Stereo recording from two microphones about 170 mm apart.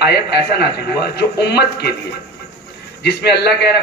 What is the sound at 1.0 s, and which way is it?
Speech, 75° left (ahead or behind).